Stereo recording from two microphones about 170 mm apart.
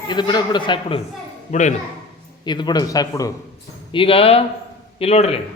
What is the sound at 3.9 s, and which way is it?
Speech, 30° left (ahead or behind).